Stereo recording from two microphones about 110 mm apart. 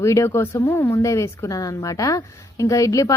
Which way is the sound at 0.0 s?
25° left (ahead or behind).